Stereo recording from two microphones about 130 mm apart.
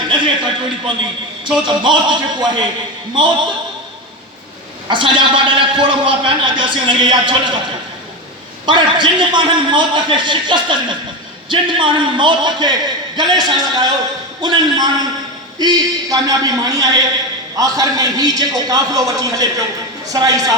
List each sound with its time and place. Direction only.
0.1 s a man's voice: 35° right (ahead or behind)
4.9 s a man's voice: 40° right (ahead or behind)
8.6 s a man's voice: 40° right (ahead or behind)